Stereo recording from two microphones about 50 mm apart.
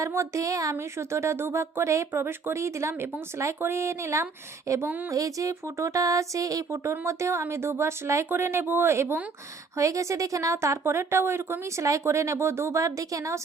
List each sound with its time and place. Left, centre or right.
0.0 s speech: right
2.1 s speech: right
2.6 s speech: right
7.0 s speech: right
8.3 s speech: right
9.7 s speech: right
11.8 s speech: right